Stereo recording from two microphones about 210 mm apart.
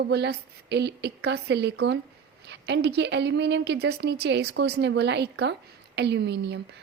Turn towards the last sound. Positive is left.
turn(degrees=-55)  # may be behind; listen again after turning